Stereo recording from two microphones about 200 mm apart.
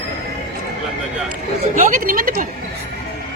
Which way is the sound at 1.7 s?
40° right (ahead or behind).